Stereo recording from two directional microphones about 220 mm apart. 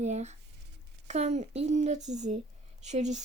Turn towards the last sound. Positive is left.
turn(degrees=-30)  # may be behind; listen again after turning